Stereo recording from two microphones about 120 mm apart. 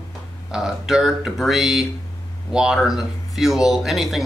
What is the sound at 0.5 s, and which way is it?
Speech, 5° right (ahead or behind).